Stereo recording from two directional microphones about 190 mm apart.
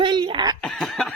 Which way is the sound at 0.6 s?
Centre (ahead or behind).